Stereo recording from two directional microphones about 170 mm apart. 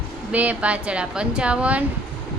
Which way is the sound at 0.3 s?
10° right (ahead or behind).